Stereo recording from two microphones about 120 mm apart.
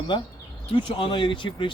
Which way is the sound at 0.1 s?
40° left (ahead or behind).